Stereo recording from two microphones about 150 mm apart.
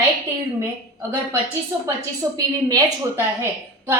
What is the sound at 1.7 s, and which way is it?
A woman's voice, 15° right (ahead or behind).